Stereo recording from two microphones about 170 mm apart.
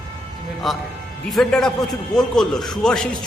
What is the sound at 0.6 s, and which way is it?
A man's voice, centre (ahead or behind).